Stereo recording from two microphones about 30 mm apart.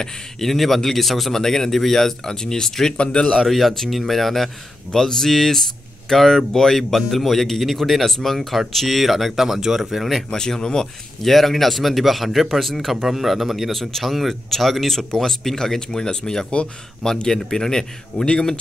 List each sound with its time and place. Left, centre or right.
0.0 s speech: centre
3.0 s speech: left
3.4 s speech: centre
6.8 s speech: centre
10.6 s speech: left
11.2 s speech: centre
13.7 s speech: centre